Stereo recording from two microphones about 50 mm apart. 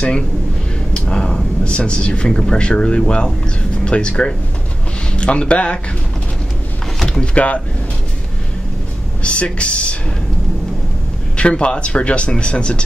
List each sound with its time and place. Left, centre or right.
0.9 s speech: centre
7.1 s speech: left
9.2 s speech: left
11.3 s speech: left